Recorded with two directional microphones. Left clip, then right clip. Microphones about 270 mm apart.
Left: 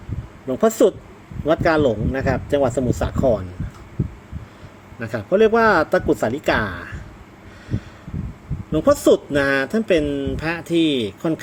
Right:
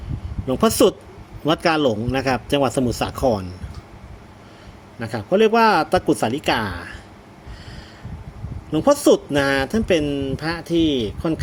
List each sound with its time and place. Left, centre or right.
0.4 s a man's voice: centre
4.9 s a man's voice: centre
8.7 s speech: centre